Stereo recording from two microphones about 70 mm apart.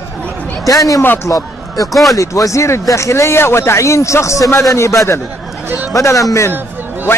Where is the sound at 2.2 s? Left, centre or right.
Left.